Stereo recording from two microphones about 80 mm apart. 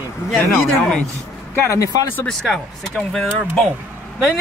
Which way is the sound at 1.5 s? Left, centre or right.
Left.